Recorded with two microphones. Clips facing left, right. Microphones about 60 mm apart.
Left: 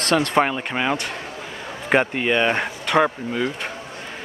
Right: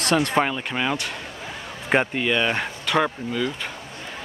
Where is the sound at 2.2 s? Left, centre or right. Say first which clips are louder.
Left 3 dB; centre.